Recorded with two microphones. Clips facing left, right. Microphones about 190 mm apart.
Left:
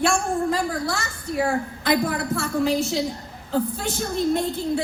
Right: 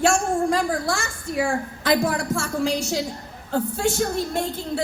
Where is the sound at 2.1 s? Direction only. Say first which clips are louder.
Even; 45° right (ahead or behind).